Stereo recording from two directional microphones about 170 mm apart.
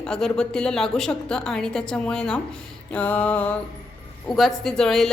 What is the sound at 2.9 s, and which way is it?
Mantra, 10° left (ahead or behind).